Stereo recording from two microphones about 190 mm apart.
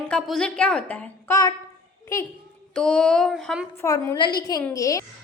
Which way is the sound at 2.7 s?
5° left (ahead or behind).